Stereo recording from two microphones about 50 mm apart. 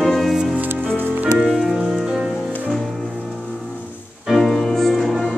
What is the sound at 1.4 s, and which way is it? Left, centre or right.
Music, centre.